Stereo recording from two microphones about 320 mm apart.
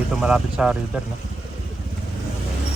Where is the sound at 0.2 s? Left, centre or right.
Centre.